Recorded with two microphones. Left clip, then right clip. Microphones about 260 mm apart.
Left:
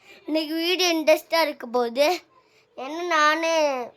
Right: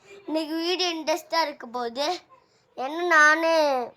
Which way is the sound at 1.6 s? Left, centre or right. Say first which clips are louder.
Left 7 dB; centre.